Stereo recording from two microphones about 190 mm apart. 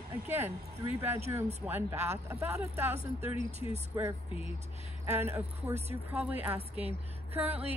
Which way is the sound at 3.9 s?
15° right (ahead or behind).